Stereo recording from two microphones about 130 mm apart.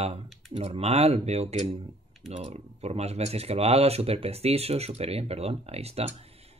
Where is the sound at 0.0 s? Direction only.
50° right (ahead or behind).